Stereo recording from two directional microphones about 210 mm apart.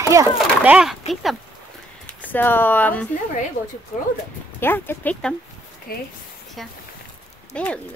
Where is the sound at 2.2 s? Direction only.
10° left (ahead or behind).